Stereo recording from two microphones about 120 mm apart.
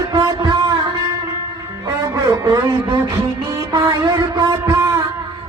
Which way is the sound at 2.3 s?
35° right (ahead or behind).